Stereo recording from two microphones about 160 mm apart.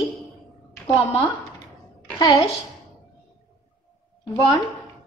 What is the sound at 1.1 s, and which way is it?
A woman's voice, 35° left (ahead or behind).